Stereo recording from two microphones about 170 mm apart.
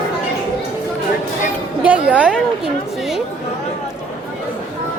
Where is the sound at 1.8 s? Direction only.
5° right (ahead or behind).